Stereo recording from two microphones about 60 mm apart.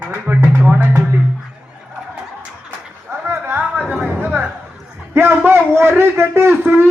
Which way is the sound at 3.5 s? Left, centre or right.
Right.